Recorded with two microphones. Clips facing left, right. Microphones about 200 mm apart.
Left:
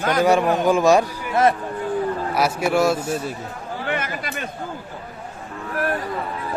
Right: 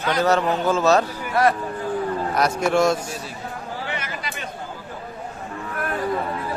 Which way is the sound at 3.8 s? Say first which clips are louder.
Left 4 dB; 55° left (ahead or behind).